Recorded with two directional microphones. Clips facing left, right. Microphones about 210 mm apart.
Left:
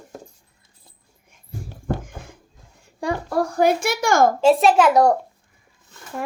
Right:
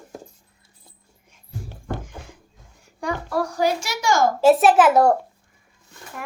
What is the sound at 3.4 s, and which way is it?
Speech, 55° left (ahead or behind).